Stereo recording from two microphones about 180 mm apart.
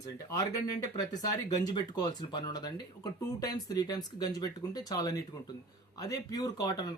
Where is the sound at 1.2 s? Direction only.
20° left (ahead or behind).